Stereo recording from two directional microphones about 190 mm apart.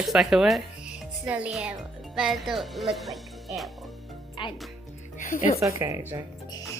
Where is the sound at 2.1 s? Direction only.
Centre (ahead or behind).